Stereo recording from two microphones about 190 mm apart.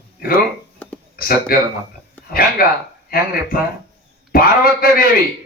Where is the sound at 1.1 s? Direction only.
50° left (ahead or behind).